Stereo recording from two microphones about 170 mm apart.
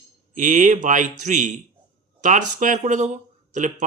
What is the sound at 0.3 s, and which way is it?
Speech, 50° right (ahead or behind).